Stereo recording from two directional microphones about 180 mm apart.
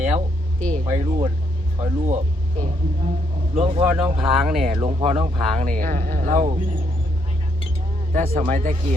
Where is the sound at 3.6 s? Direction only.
30° right (ahead or behind).